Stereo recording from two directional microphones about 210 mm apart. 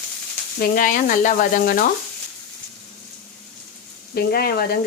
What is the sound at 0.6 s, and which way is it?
A woman's voice, 40° left (ahead or behind).